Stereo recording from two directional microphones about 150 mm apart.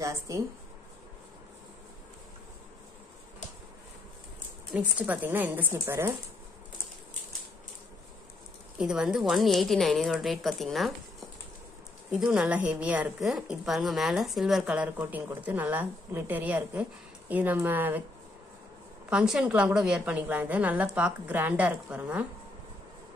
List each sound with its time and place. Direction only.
0.0 s a sound: 20° right (ahead or behind)
4.7 s a woman's voice: 10° right (ahead or behind)
8.7 s a woman's voice: 5° right (ahead or behind)
19.0 s a woman's voice: 5° right (ahead or behind)